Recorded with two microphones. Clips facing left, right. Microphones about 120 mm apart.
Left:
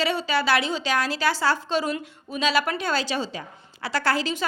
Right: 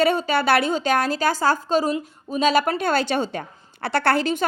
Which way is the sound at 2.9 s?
55° right (ahead or behind).